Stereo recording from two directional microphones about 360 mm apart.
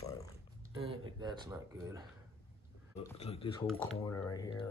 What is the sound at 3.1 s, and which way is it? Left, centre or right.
Speech, centre.